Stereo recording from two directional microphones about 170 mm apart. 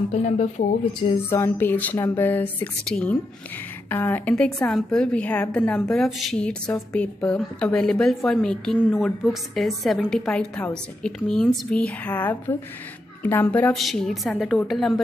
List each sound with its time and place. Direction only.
0.1 s speech: 40° left (ahead or behind)
1.3 s a woman's voice: 15° left (ahead or behind)